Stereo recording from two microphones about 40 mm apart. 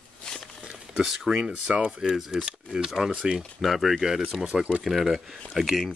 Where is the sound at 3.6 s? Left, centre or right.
Centre.